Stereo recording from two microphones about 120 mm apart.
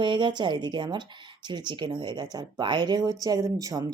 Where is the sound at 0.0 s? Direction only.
40° right (ahead or behind).